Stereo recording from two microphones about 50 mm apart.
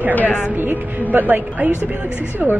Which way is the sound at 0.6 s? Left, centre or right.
Right.